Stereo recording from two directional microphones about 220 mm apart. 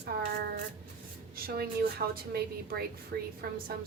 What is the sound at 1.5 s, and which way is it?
A woman's voice, 45° right (ahead or behind).